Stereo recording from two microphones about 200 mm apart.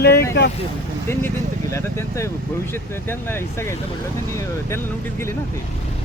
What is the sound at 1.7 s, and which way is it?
Speech, 15° left (ahead or behind).